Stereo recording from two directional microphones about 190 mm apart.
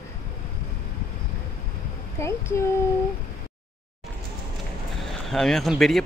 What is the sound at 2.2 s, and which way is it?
Speech, 15° left (ahead or behind).